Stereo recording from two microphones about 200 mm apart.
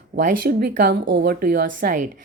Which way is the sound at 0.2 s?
45° right (ahead or behind).